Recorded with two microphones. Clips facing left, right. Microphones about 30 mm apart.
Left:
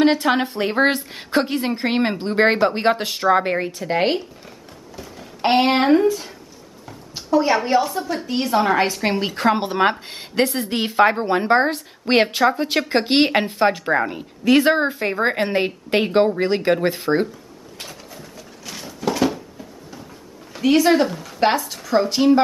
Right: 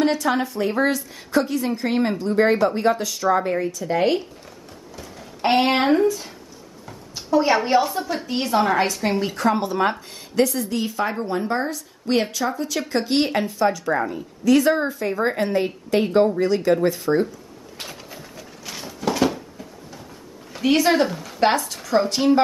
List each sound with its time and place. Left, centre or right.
0.0 s a woman's voice: left
5.4 s speech: centre
6.9 s a woman's voice: centre
8.8 s a woman's voice: left
9.4 s a woman's voice: left
17.7 s a sound: centre
20.5 s a woman's voice: centre